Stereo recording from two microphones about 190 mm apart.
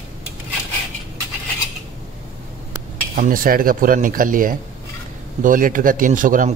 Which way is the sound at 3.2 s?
45° right (ahead or behind).